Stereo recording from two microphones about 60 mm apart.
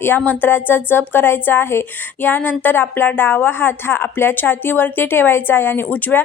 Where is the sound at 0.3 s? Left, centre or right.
Left.